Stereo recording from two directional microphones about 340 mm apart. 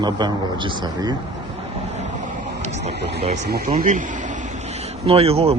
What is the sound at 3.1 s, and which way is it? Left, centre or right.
Speech, right.